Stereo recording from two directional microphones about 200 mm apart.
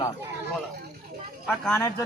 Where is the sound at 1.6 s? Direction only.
5° left (ahead or behind).